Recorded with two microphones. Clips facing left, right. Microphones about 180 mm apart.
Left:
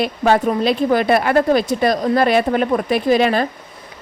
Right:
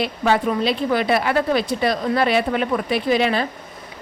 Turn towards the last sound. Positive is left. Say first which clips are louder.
# left 4 dB
turn(degrees=45)  # may be behind; listen again after turning